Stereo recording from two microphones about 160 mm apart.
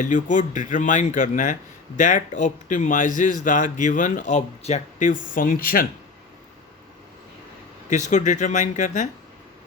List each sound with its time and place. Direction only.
0.0 s speech: 50° left (ahead or behind)
7.9 s speech: 50° left (ahead or behind)